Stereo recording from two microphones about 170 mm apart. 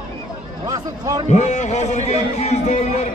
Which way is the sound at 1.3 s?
45° left (ahead or behind).